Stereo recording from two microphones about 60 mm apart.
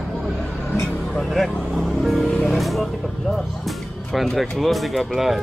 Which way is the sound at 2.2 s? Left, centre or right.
Left.